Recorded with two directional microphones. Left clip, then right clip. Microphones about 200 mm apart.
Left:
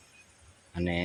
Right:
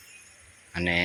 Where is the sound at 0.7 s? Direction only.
10° left (ahead or behind).